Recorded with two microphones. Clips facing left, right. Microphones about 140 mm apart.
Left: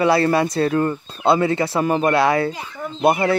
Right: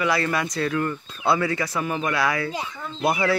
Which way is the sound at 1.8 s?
40° left (ahead or behind).